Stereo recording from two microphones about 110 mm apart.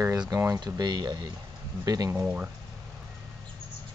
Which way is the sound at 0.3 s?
25° right (ahead or behind).